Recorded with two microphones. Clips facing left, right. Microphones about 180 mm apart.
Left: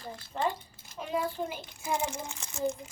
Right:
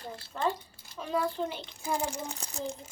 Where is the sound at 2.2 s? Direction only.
35° right (ahead or behind).